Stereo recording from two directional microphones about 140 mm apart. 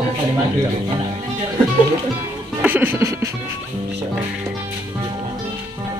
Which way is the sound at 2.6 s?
15° right (ahead or behind).